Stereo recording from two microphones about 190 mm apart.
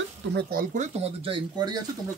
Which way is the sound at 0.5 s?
40° right (ahead or behind).